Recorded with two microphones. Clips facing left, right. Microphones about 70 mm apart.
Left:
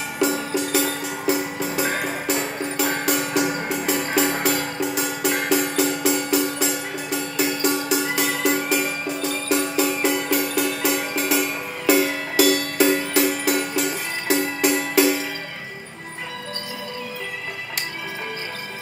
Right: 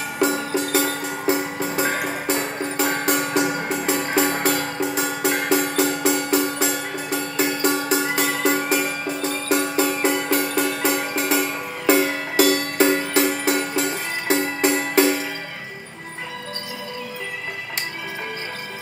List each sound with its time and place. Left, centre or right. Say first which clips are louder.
0.2 s music: right 1 dB; right